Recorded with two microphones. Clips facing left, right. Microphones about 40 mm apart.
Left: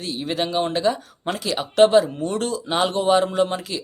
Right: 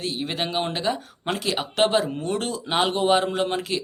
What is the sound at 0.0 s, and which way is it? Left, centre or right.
Speech, right.